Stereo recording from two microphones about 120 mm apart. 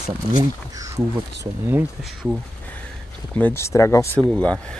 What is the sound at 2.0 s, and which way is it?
Speech, 5° right (ahead or behind).